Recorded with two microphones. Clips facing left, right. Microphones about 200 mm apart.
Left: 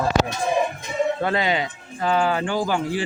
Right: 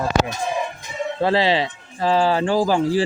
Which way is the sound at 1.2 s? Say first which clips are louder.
Right 4 dB; 30° right (ahead or behind).